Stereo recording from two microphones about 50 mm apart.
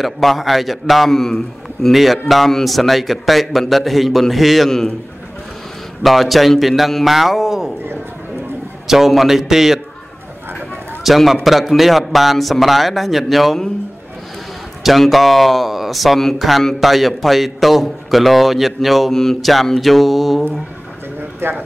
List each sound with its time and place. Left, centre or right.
0.0 s speech: centre
6.0 s speech: centre
8.8 s speech: centre
11.1 s speech: centre
14.8 s speech: centre
21.4 s speech: right